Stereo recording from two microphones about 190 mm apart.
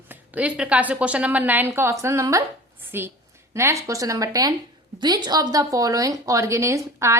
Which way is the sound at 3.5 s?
15° right (ahead or behind).